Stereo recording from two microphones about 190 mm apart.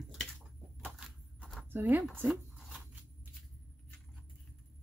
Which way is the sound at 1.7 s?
10° right (ahead or behind).